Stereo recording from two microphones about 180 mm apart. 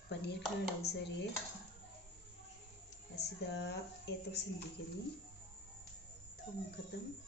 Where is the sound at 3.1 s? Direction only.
70° left (ahead or behind).